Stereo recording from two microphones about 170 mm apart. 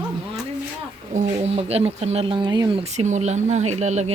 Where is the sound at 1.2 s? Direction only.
40° right (ahead or behind).